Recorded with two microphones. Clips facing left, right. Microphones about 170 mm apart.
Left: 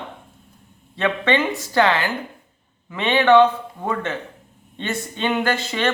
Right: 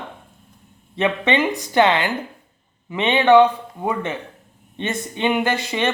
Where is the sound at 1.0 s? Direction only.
20° right (ahead or behind).